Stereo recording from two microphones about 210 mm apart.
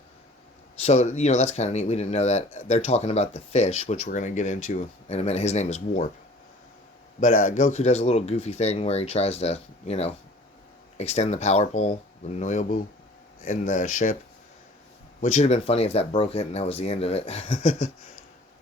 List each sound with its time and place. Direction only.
0.8 s speech: 30° left (ahead or behind)
7.2 s speech: 35° left (ahead or behind)
15.2 s speech: 30° left (ahead or behind)